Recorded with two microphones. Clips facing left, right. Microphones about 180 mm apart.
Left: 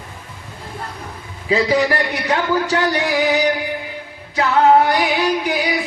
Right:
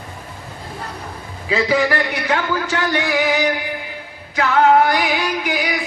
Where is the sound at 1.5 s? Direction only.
35° left (ahead or behind).